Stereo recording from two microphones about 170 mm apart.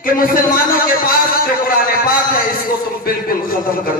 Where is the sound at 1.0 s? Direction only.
60° left (ahead or behind).